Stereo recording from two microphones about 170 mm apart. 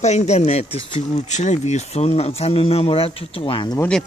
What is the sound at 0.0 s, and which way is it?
Speech, 40° left (ahead or behind).